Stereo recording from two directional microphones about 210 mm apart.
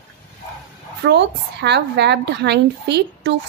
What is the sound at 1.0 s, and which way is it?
A woman's voice, 55° right (ahead or behind).